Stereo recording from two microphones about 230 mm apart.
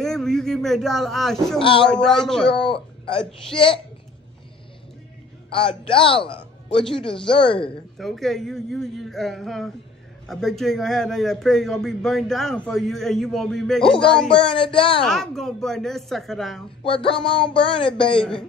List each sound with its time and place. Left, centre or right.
0.0 s speech: centre
1.6 s speech: left
1.9 s speech: centre
2.6 s speech: left
5.5 s speech: left
8.0 s speech: centre
14.3 s speech: left
15.0 s speech: centre
16.8 s speech: left